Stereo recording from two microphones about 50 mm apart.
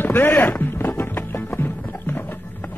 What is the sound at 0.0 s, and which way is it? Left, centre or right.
Music, left.